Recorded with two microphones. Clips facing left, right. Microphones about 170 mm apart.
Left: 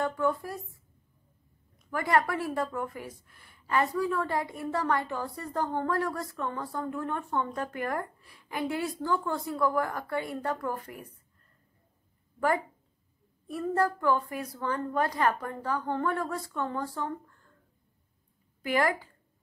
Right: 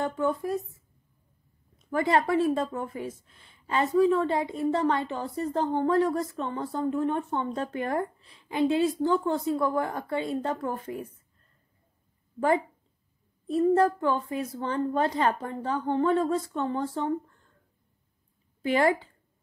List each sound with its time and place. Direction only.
0.0 s a woman's voice: 20° right (ahead or behind)
1.9 s a woman's voice: 25° right (ahead or behind)
12.4 s a woman's voice: 20° right (ahead or behind)
18.6 s a woman's voice: 25° right (ahead or behind)